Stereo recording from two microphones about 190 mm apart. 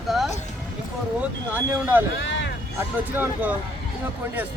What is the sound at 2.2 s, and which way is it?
Vehicle, 70° left (ahead or behind).